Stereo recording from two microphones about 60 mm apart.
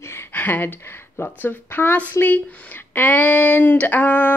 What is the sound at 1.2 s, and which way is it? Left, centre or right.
Speech, left.